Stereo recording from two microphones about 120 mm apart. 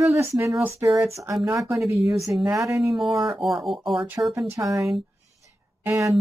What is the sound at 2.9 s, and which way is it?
Speech, centre (ahead or behind).